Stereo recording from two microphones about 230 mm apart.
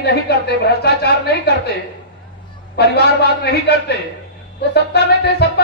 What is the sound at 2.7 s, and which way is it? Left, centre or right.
A woman's voice, left.